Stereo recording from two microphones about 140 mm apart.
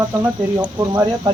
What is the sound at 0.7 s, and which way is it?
Speech, 30° right (ahead or behind).